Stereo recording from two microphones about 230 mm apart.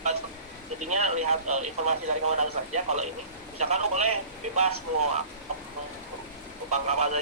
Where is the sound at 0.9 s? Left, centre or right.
Right.